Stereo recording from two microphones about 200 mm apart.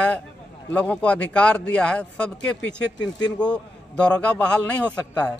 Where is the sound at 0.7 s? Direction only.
5° left (ahead or behind).